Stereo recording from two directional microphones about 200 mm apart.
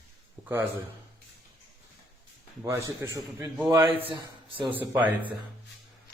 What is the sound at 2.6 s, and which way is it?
A man's voice, 15° right (ahead or behind).